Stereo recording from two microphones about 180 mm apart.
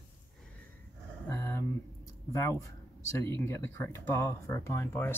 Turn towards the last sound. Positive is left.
turn(degrees=15)  # may be behind; listen again after turning